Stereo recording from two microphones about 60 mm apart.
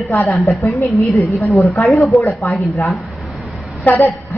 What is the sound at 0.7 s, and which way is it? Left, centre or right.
Speech, left.